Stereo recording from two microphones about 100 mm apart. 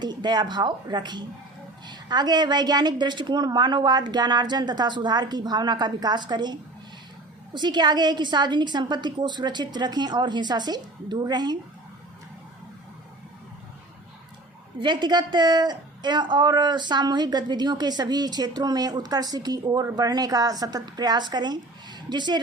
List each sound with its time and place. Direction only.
0.0 s a woman's voice: 45° right (ahead or behind)
14.8 s a woman's voice: 50° right (ahead or behind)